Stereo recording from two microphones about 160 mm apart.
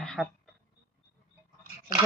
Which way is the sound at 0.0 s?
5° left (ahead or behind).